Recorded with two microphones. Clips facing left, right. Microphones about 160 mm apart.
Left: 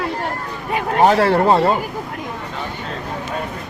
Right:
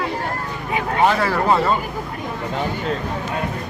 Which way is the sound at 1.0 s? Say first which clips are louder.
Left 5 dB; 35° left (ahead or behind).